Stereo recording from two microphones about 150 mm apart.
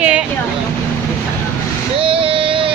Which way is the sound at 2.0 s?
35° right (ahead or behind).